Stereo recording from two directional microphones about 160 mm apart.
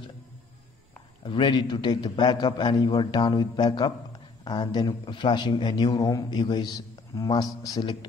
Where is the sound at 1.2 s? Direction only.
30° left (ahead or behind).